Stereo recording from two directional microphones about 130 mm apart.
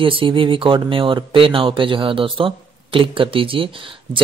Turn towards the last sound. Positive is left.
turn(degrees=-45)  # may be behind; listen again after turning